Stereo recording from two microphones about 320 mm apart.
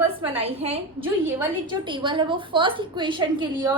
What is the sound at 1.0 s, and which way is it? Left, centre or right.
A woman's voice, centre.